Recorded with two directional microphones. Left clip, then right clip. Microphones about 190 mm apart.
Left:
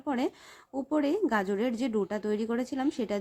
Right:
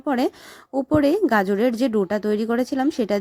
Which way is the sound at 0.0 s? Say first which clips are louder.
Right 9 dB; 40° right (ahead or behind).